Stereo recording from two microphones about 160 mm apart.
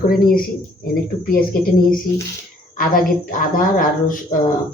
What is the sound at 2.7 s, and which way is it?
Speech, 60° left (ahead or behind).